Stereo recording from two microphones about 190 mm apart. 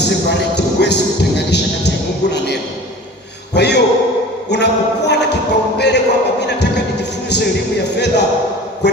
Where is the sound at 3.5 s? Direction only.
65° left (ahead or behind).